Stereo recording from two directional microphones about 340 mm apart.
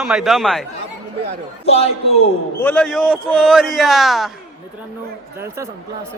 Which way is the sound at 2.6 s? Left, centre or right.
Centre.